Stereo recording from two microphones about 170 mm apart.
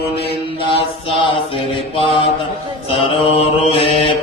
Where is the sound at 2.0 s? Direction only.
30° left (ahead or behind).